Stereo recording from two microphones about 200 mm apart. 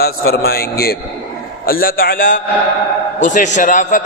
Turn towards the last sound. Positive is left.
turn(degrees=40)  # may be behind; listen again after turning